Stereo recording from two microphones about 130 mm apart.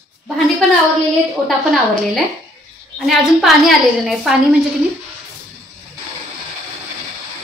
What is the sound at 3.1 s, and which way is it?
A woman's voice, centre (ahead or behind).